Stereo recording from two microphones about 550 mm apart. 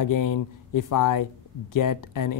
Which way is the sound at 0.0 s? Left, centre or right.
Left.